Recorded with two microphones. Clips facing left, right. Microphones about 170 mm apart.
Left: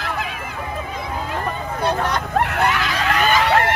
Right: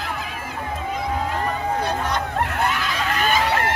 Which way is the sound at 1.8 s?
70° left (ahead or behind).